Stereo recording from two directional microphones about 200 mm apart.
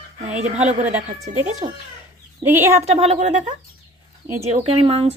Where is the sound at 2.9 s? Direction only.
30° right (ahead or behind).